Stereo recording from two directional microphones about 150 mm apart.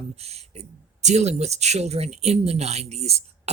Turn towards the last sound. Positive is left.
turn(degrees=-45)  # may be behind; listen again after turning